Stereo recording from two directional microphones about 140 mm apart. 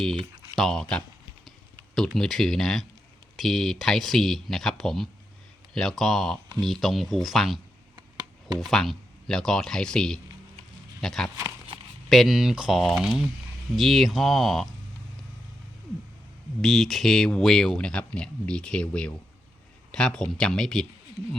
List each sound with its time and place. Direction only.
0.5 s speech: 5° left (ahead or behind)
7.9 s a sound: 25° right (ahead or behind)
8.5 s speech: centre (ahead or behind)
16.6 s speech: centre (ahead or behind)